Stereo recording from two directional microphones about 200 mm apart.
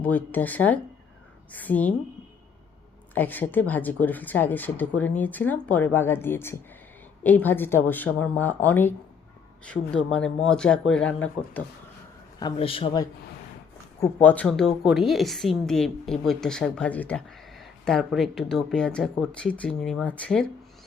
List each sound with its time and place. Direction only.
0.0 s speech: 5° left (ahead or behind)
3.2 s speech: 10° left (ahead or behind)
10.1 s a woman's voice: 5° left (ahead or behind)
12.4 s a man's voice: 25° left (ahead or behind)
14.0 s a woman's voice: 10° left (ahead or behind)